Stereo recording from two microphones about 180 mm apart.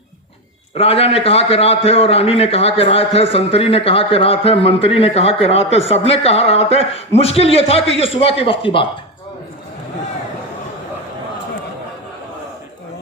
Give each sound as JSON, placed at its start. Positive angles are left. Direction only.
{"t": 0.8, "sound": "a man's voice", "side_deg": 35}